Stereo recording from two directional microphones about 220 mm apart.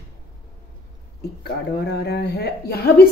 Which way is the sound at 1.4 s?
50° left (ahead or behind).